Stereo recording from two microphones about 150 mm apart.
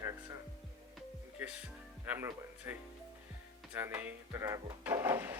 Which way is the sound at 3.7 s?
15° right (ahead or behind).